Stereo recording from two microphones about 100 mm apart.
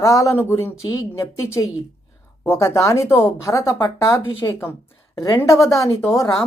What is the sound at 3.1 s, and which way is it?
A woman's voice, 25° left (ahead or behind).